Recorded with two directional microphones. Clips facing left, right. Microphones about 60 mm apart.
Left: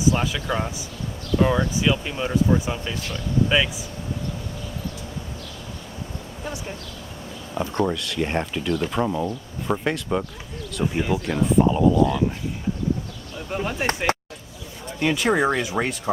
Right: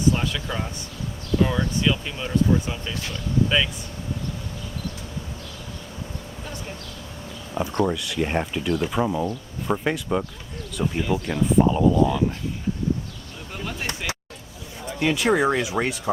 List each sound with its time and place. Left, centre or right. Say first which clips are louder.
0.1 s speech: left 5 dB; centre
7.7 s speech: even; centre
7.9 s speech: even; centre
13.5 s speech: left 6 dB; left
14.1 s vehicle: left 9 dB; left
14.9 s speech: even; centre